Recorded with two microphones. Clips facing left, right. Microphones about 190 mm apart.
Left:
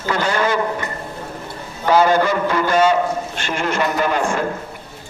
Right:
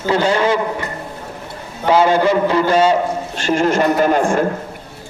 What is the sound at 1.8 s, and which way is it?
A man's voice, 25° right (ahead or behind).